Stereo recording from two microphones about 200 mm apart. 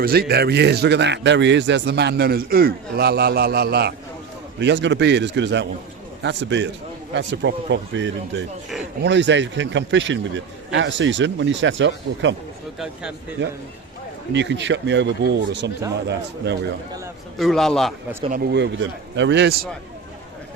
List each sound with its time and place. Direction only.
0.0 s a man's voice: 50° right (ahead or behind)
12.8 s a man's voice: 5° right (ahead or behind)
13.4 s a man's voice: 60° right (ahead or behind)
17.3 s a man's voice: centre (ahead or behind)
18.3 s a man's voice: 55° right (ahead or behind)